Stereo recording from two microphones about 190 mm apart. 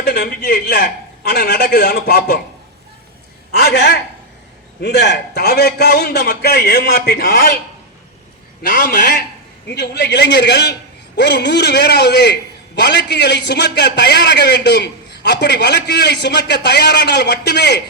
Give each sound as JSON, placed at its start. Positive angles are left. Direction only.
{"t": 0.0, "sound": "a man's voice", "side_deg": 55}
{"t": 3.6, "sound": "a man's voice", "side_deg": 60}
{"t": 8.6, "sound": "a man's voice", "side_deg": 60}